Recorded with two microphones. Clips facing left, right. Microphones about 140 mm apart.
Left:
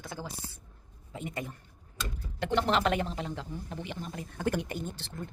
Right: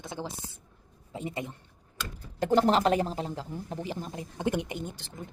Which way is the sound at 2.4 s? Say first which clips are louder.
Right 5 dB; 40° right (ahead or behind).